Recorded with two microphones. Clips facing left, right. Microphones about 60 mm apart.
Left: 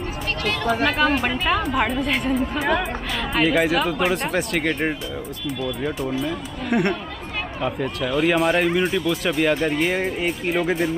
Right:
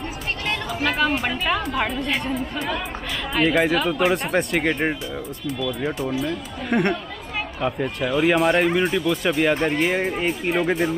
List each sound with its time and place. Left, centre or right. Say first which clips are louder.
0.8 s speech: right 1 dB; centre
5.9 s speech: even; centre